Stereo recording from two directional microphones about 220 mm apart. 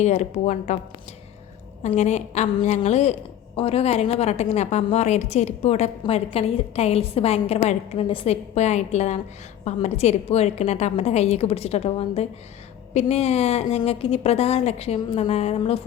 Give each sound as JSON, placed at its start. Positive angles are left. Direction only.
{"t": 0.0, "sound": "a woman's voice", "side_deg": 30}
{"t": 1.8, "sound": "a woman's voice", "side_deg": 30}